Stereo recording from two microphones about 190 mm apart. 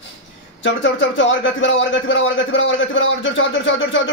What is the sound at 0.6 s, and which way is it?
A man's voice, 80° left.